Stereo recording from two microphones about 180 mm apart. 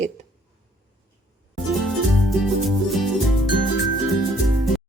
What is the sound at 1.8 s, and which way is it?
Music, centre (ahead or behind).